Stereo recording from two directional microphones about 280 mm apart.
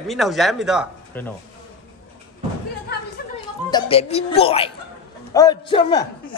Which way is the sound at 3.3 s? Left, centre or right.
Centre.